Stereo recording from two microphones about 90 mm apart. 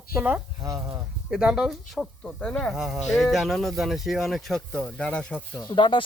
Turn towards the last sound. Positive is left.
turn(degrees=60)  # may be behind; listen again after turning